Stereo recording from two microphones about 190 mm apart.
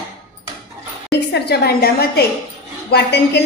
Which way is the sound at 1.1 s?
60° left (ahead or behind).